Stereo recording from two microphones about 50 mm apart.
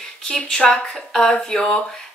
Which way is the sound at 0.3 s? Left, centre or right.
Centre.